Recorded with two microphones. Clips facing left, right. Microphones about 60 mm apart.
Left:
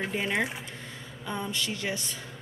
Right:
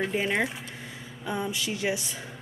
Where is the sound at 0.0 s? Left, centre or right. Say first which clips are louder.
Right 2 dB; centre.